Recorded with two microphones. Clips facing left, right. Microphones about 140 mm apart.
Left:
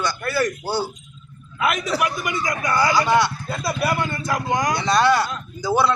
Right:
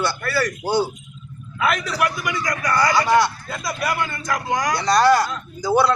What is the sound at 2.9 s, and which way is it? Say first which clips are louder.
Speech: right 1 dB; centre (ahead or behind).